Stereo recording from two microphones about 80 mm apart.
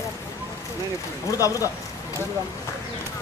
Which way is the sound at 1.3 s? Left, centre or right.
Left.